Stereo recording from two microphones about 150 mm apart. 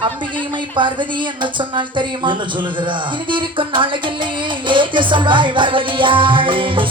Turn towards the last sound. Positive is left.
turn(degrees=-35)  # may be behind; listen again after turning